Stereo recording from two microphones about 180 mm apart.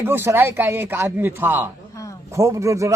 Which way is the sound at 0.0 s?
10° right (ahead or behind).